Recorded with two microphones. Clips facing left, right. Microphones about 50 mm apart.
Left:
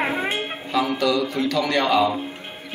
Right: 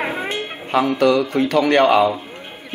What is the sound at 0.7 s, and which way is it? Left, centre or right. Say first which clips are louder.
Speech: right 5 dB; right.